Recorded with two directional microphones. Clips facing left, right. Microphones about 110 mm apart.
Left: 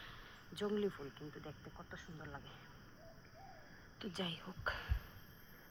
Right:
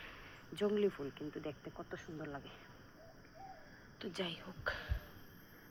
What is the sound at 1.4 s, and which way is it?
Speech, 75° right (ahead or behind).